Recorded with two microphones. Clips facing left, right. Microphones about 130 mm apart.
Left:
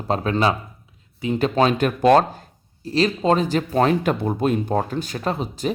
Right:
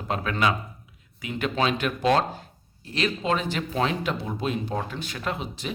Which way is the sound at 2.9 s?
35° left (ahead or behind).